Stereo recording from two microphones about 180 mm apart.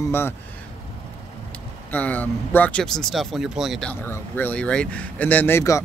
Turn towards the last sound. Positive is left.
turn(degrees=15)  # may be behind; listen again after turning